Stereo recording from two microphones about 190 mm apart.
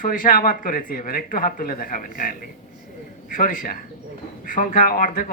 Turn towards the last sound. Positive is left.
turn(degrees=45)  # may be behind; listen again after turning